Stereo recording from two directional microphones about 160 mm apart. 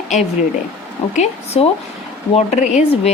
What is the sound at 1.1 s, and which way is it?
A woman's voice, 45° left (ahead or behind).